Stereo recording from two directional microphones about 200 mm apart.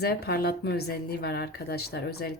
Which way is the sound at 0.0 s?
50° left (ahead or behind).